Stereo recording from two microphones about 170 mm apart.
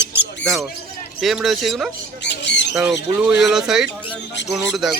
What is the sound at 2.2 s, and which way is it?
Squawk, 90° left.